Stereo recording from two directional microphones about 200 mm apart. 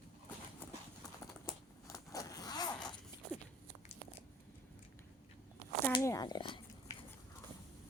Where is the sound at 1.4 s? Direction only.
15° left (ahead or behind).